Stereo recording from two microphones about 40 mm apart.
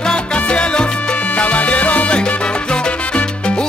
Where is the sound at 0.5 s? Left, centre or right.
Left.